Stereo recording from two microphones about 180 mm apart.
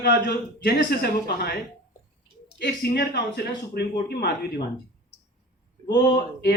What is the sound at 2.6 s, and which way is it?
Speech, 70° left (ahead or behind).